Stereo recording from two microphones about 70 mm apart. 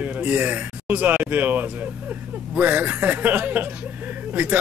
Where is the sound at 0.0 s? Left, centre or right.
Right.